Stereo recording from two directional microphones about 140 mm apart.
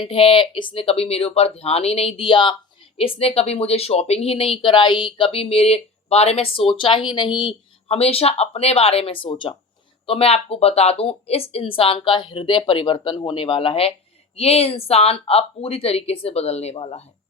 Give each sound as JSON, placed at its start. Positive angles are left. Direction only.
{"t": 0.0, "sound": "speech", "side_deg": 40}